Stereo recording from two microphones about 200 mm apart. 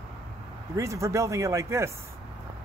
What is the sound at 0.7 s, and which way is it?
Speech, 15° right (ahead or behind).